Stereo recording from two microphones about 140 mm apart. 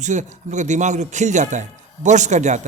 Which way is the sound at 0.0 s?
60° right (ahead or behind).